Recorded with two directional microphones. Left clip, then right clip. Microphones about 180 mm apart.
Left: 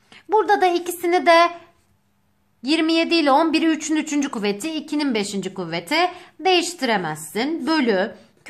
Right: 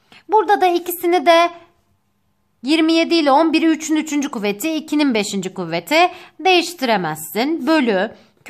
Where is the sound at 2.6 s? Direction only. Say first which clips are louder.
Right 4 dB; 25° right (ahead or behind).